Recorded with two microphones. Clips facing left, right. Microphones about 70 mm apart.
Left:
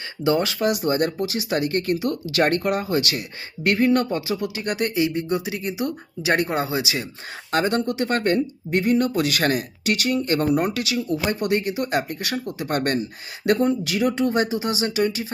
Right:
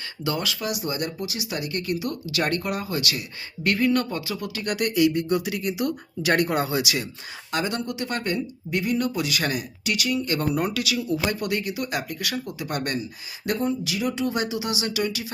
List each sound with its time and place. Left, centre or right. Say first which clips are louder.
0.3 s speech: left 7 dB; left
7.5 s speech: left 6 dB; left